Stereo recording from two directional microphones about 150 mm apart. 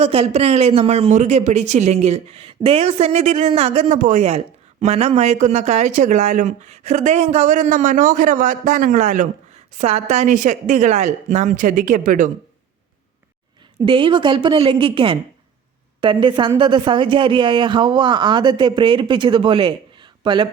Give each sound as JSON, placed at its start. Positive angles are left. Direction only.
{"t": 0.0, "sound": "speech", "side_deg": -45}
{"t": 13.8, "sound": "a man's voice", "side_deg": -35}